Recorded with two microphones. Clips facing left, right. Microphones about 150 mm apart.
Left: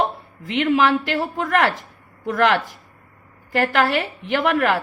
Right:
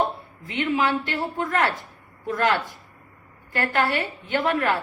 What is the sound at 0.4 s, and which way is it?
A woman's voice, 90° left.